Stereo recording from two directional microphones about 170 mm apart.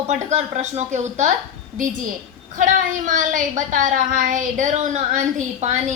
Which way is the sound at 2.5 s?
50° right (ahead or behind).